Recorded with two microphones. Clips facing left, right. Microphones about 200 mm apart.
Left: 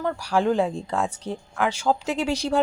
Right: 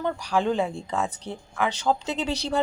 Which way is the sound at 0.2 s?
10° left (ahead or behind).